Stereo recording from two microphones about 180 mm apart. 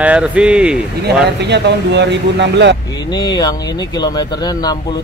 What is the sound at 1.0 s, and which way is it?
Speech, 70° right (ahead or behind).